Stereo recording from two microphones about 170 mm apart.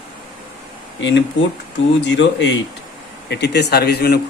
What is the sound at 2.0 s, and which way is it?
Speech, 90° left.